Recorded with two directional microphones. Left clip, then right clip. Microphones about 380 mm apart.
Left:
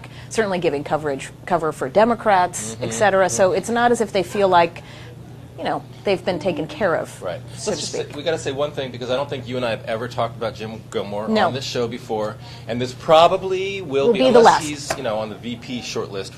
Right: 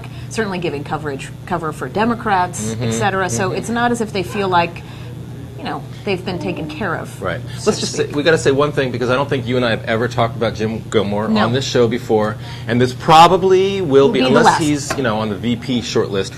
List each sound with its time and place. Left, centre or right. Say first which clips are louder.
0.4 s a woman's voice: left 1 dB; centre
8.2 s speech: right 9 dB; right
14.1 s a woman's voice: even; centre
15.0 s speech: right 5 dB; right